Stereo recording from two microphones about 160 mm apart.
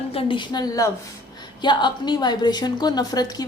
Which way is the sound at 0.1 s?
35° left (ahead or behind).